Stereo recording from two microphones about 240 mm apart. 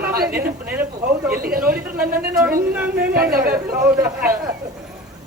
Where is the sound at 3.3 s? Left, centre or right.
Right.